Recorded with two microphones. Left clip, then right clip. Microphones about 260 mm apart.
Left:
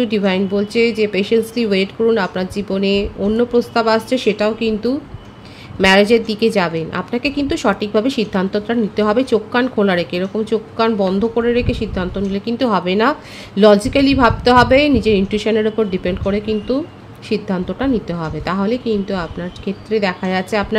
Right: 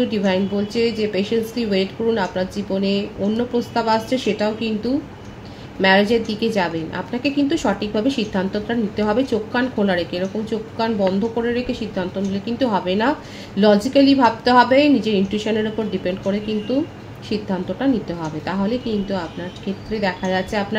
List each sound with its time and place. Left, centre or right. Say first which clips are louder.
0.0 s a woman's voice: left 3 dB; left